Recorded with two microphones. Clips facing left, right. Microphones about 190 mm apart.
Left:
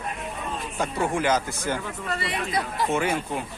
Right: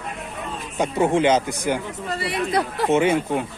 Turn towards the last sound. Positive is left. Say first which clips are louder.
# right 7 dB
turn(degrees=-20)  # may be behind; listen again after turning